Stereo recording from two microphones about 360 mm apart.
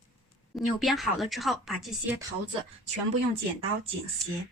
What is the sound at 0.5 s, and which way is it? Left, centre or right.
Speech, centre.